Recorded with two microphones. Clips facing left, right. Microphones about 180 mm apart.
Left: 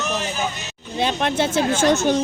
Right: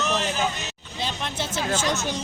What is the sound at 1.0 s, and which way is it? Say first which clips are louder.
Speech: left 10 dB; 65° left (ahead or behind).